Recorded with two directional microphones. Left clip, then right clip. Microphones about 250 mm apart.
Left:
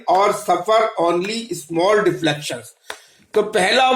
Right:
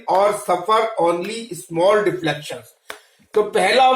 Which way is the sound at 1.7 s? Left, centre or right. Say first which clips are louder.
Even; left.